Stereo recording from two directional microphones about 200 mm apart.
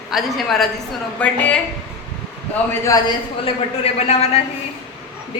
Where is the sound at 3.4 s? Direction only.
30° left (ahead or behind).